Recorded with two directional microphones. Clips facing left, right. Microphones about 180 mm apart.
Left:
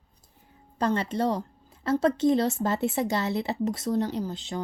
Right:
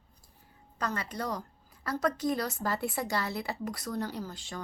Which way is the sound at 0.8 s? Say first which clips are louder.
Left 9 dB; 30° left (ahead or behind).